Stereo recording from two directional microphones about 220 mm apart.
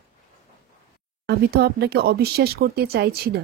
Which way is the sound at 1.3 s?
45° right (ahead or behind).